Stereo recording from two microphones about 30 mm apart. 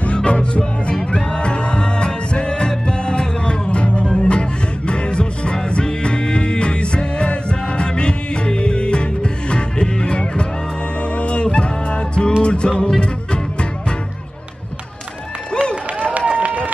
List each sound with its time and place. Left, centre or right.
0.0 s music: left
16.0 s run: right